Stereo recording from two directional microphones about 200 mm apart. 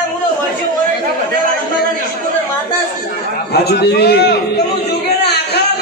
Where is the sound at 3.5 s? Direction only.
55° left (ahead or behind).